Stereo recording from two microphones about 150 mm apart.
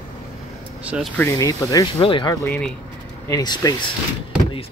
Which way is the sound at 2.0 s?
35° left (ahead or behind).